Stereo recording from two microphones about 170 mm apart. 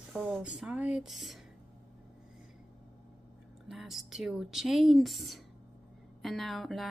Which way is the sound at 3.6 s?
Centre (ahead or behind).